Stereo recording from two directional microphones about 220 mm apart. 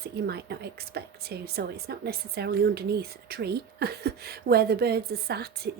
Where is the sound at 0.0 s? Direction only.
45° right (ahead or behind).